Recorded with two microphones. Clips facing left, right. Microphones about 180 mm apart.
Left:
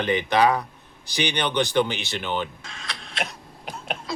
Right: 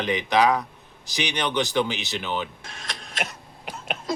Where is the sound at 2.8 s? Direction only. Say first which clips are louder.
Left 1 dB; 45° right (ahead or behind).